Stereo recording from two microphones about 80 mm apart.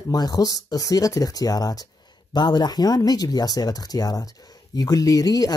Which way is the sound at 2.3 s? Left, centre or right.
Left.